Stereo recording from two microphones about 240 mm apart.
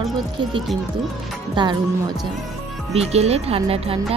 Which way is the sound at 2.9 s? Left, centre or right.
Right.